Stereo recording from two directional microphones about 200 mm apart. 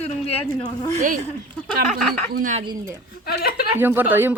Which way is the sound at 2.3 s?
40° right (ahead or behind).